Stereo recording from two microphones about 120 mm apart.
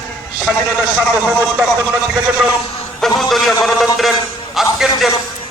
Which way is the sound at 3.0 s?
Centre (ahead or behind).